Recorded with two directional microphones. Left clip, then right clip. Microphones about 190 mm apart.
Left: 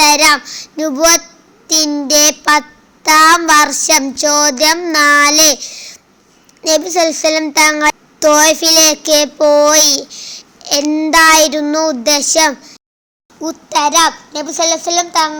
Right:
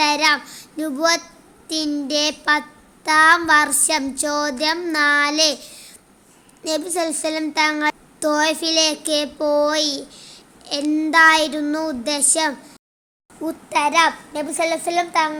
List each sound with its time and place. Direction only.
0.0 s child singing: 10° left (ahead or behind)
1.6 s a child's voice: 10° left (ahead or behind)
13.4 s a child's voice: 25° left (ahead or behind)